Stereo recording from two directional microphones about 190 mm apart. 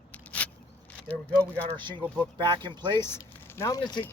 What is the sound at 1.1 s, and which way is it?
Speech, 10° left (ahead or behind).